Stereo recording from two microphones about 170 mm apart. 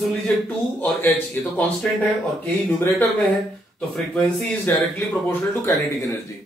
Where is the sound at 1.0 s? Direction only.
10° left (ahead or behind).